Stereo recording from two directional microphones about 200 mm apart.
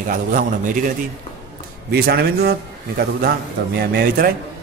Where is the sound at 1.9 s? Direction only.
50° right (ahead or behind).